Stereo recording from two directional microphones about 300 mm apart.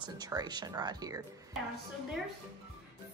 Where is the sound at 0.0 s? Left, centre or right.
Centre.